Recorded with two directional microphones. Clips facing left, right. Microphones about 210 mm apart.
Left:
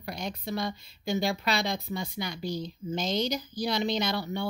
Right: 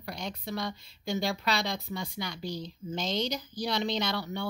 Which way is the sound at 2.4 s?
50° left (ahead or behind).